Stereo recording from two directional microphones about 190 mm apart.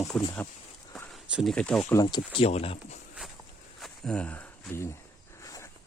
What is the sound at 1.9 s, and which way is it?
Speech, 25° left (ahead or behind).